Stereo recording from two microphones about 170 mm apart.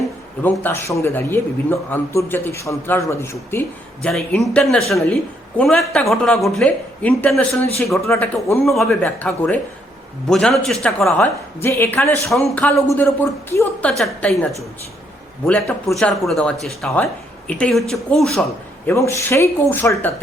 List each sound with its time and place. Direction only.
0.4 s speech: 10° left (ahead or behind)
4.0 s speech: 5° left (ahead or behind)
8.6 s speech: centre (ahead or behind)
12.3 s speech: centre (ahead or behind)
13.9 s speech: centre (ahead or behind)
15.4 s speech: 5° left (ahead or behind)
18.9 s speech: 15° left (ahead or behind)